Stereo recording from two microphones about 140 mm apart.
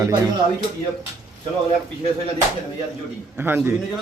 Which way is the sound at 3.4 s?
15° right (ahead or behind).